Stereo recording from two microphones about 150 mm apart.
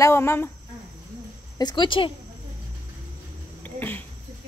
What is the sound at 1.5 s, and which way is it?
Speech, 30° left (ahead or behind).